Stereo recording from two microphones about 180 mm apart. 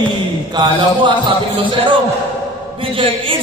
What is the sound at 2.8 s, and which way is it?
Speech, 30° right (ahead or behind).